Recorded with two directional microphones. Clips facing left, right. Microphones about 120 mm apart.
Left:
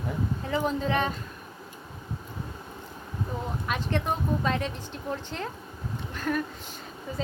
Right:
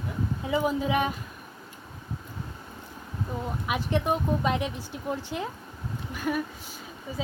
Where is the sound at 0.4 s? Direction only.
10° right (ahead or behind).